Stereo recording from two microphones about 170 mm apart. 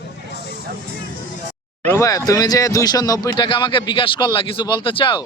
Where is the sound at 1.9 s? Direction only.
20° left (ahead or behind).